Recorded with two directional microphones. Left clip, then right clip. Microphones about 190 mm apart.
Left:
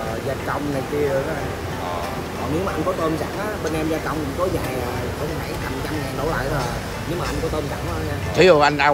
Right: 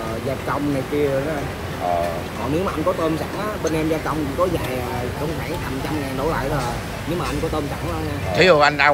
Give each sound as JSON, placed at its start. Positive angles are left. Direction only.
{"t": 8.4, "sound": "speech", "side_deg": 15}